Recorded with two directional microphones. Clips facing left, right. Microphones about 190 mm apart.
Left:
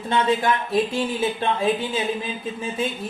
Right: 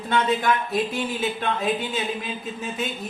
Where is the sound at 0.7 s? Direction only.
25° left (ahead or behind).